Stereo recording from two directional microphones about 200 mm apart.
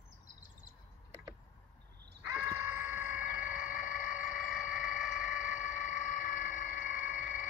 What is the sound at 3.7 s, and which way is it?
Vehicle, 40° left (ahead or behind).